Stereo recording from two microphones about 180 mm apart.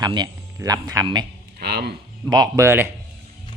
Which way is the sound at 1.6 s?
65° right (ahead or behind).